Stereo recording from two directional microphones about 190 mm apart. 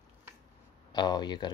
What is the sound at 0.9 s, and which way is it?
Speech, 20° left (ahead or behind).